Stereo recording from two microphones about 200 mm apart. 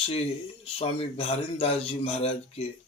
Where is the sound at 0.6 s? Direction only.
30° left (ahead or behind).